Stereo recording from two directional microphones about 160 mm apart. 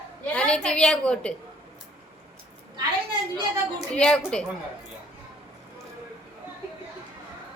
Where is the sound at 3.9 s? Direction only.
5° left (ahead or behind).